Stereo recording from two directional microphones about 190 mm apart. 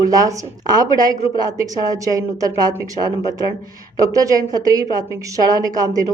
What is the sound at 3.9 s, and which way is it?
A woman's voice, 20° right (ahead or behind).